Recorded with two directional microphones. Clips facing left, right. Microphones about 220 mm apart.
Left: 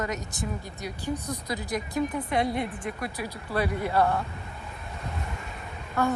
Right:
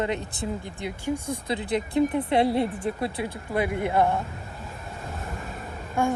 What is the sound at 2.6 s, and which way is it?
Speech, 40° right (ahead or behind).